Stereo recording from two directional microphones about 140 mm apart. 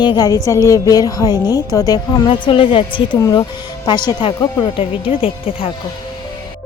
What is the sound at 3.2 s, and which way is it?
Speech, 25° left (ahead or behind).